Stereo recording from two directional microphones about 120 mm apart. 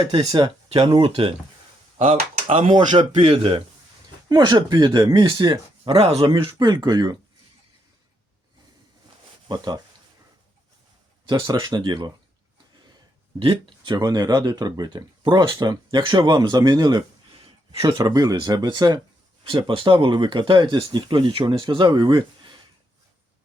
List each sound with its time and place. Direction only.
0.0 s speech: 50° right (ahead or behind)
2.0 s speech: 80° right
2.7 s speech: 40° right (ahead or behind)
3.2 s speech: 50° right (ahead or behind)
4.3 s speech: 35° right (ahead or behind)
5.9 s speech: 55° right (ahead or behind)
6.6 s speech: 35° right (ahead or behind)
9.5 s speech: 35° right (ahead or behind)
11.3 s speech: 35° right (ahead or behind)
13.4 s speech: 40° right (ahead or behind)